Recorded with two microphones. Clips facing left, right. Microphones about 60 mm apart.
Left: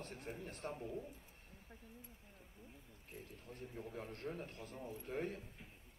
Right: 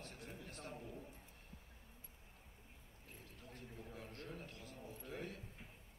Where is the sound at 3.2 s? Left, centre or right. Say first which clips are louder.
Left 3 dB; left.